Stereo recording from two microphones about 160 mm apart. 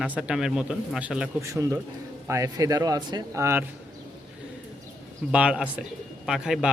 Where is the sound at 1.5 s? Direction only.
20° right (ahead or behind).